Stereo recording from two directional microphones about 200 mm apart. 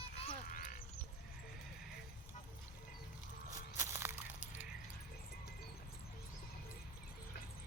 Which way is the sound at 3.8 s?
10° right (ahead or behind).